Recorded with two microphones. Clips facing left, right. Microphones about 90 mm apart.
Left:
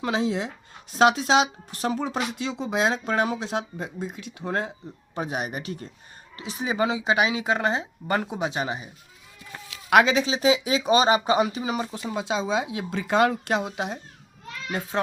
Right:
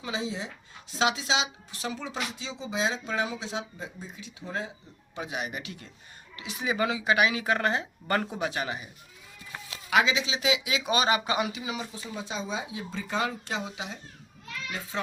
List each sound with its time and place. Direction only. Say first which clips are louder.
0.0 s speech: left 8 dB; 60° left (ahead or behind)
5.1 s speech: left 5 dB; 45° left (ahead or behind); by 8.9 s 25° left (ahead or behind)
9.9 s speech: left 6 dB; 50° left (ahead or behind)
12.0 s speech: left 10 dB; 85° left; by 15.0 s 50° left (ahead or behind)